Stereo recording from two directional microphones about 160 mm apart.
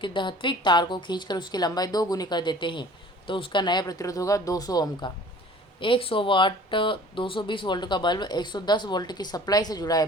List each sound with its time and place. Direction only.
0.0 s speech: 30° left (ahead or behind)